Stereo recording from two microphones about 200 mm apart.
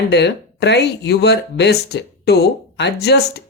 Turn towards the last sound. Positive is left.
turn(degrees=55)  # may be behind; listen again after turning